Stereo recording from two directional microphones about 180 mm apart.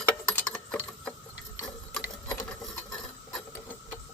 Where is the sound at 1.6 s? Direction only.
10° left (ahead or behind).